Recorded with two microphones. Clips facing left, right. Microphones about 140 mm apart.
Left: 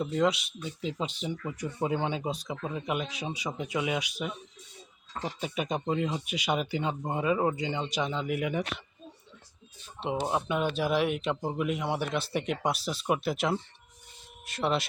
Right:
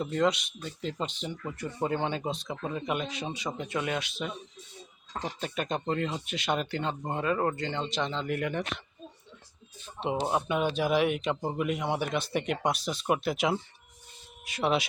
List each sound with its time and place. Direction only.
0.0 s speech: 5° left (ahead or behind)
10.0 s speech: centre (ahead or behind)